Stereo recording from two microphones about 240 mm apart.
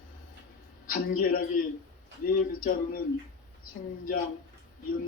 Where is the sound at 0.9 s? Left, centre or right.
Left.